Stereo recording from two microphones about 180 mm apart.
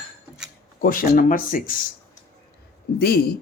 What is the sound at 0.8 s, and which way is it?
Speech, 50° left (ahead or behind).